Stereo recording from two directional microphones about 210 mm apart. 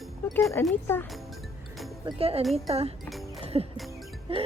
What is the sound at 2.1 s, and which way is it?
Speech, 30° right (ahead or behind).